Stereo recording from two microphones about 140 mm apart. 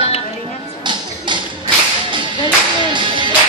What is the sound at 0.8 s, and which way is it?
Whip, 35° right (ahead or behind).